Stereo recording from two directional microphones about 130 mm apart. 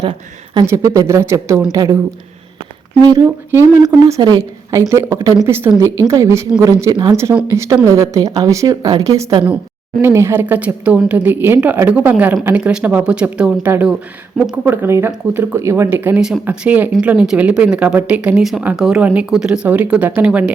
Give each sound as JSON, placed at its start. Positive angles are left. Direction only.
{"t": 0.0, "sound": "speech", "side_deg": -35}
{"t": 0.6, "sound": "a woman's voice", "side_deg": -25}
{"t": 3.2, "sound": "a woman's voice", "side_deg": -20}
{"t": 4.0, "sound": "a woman's voice", "side_deg": -30}
{"t": 6.9, "sound": "speech", "side_deg": -40}
{"t": 7.5, "sound": "a woman's voice", "side_deg": -20}